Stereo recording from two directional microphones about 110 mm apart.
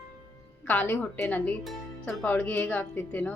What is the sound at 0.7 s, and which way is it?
A woman's voice, 15° left (ahead or behind).